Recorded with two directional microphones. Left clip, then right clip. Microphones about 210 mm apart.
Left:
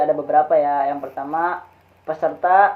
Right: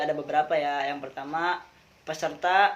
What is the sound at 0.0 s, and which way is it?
Speech, 40° right (ahead or behind).